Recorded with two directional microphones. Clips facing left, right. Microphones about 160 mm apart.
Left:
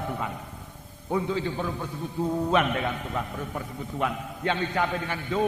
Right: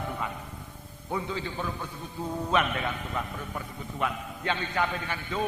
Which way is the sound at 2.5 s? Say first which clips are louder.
Left 3 dB; 40° left (ahead or behind).